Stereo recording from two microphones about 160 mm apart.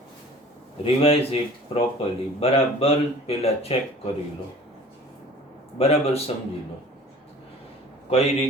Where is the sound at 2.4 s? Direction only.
40° left (ahead or behind).